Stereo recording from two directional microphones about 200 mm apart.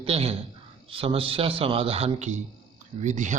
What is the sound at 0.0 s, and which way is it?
A man's voice, 30° right (ahead or behind).